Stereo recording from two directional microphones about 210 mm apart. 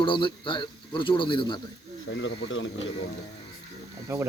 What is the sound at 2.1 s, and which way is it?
Speech, 65° left (ahead or behind).